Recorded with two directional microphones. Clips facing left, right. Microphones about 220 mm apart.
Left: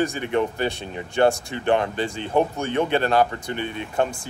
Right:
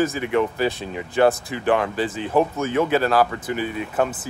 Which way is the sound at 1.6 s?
30° left (ahead or behind).